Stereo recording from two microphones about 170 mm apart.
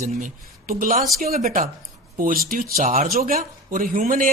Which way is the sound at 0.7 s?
55° right (ahead or behind).